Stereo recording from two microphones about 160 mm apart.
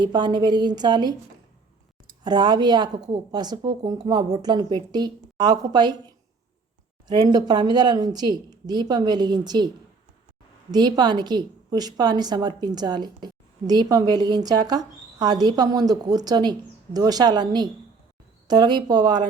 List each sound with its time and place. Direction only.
0.0 s a woman's voice: 25° right (ahead or behind)
2.2 s a woman's voice: 25° right (ahead or behind)
7.1 s a woman's voice: 25° right (ahead or behind)